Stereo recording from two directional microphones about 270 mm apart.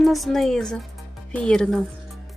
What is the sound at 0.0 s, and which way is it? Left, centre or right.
A woman's voice, centre.